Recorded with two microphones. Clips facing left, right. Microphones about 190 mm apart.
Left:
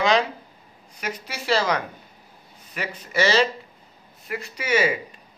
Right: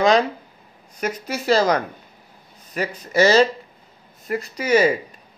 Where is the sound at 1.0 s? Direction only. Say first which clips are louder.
Right 6 dB; 45° right (ahead or behind).